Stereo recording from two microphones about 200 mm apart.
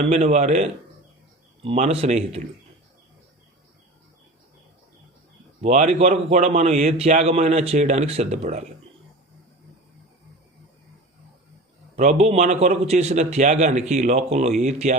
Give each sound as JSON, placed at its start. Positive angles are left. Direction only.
{"t": 0.0, "sound": "a man's voice", "side_deg": -35}
{"t": 5.6, "sound": "a man's voice", "side_deg": -35}
{"t": 11.9, "sound": "a man's voice", "side_deg": -35}